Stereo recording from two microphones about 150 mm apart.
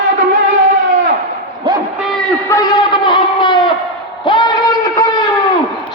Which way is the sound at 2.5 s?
25° left (ahead or behind).